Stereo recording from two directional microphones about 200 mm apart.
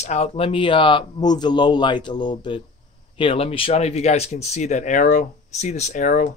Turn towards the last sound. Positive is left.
turn(degrees=40)  # may be behind; listen again after turning